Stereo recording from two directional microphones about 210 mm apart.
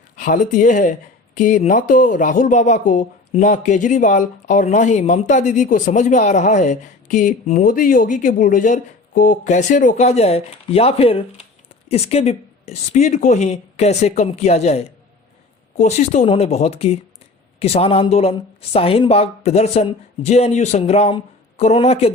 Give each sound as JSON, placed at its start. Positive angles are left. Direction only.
{"t": 0.2, "sound": "speech", "side_deg": 35}